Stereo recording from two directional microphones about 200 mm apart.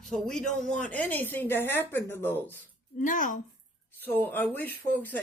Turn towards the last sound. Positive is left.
turn(degrees=10)  # may be behind; listen again after turning